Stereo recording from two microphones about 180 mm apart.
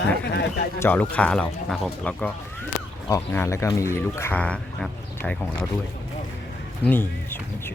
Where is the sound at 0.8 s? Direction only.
10° left (ahead or behind).